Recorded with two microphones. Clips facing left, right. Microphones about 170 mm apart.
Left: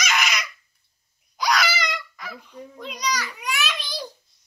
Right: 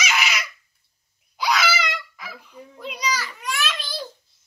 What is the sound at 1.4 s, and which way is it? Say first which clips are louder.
Babbling: right 1 dB; 5° right (ahead or behind).